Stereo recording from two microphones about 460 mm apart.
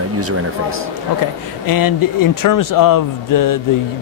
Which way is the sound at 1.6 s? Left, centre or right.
Left.